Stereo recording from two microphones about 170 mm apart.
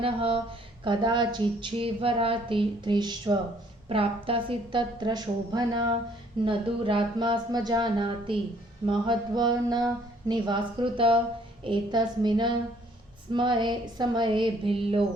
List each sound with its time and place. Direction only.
0.0 s speech: 35° right (ahead or behind)